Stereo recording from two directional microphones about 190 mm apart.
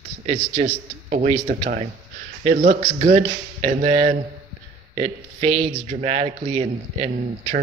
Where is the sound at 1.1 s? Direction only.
35° right (ahead or behind).